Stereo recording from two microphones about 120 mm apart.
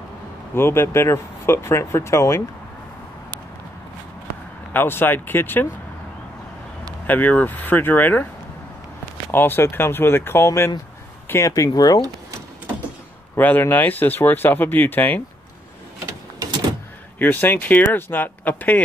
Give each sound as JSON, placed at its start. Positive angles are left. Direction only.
{"t": 0.6, "sound": "speech", "side_deg": 20}
{"t": 4.7, "sound": "speech", "side_deg": 15}
{"t": 7.1, "sound": "speech", "side_deg": 15}
{"t": 9.3, "sound": "speech", "side_deg": 20}
{"t": 13.4, "sound": "speech", "side_deg": 15}
{"t": 17.2, "sound": "speech", "side_deg": 15}